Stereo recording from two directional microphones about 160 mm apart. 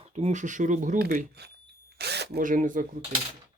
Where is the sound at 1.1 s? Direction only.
90° right; by 2.8 s 55° right (ahead or behind).